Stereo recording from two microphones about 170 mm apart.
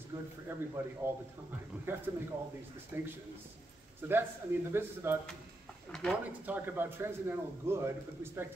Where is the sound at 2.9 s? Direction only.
15° right (ahead or behind).